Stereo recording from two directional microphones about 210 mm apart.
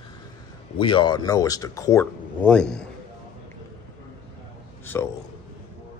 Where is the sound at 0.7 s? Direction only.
25° left (ahead or behind); by 2.9 s 5° left (ahead or behind).